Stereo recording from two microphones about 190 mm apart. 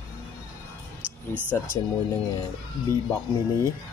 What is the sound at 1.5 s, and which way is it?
Speech, 15° left (ahead or behind).